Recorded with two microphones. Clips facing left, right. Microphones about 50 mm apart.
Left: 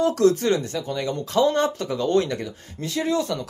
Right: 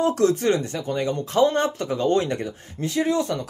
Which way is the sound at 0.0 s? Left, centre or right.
Right.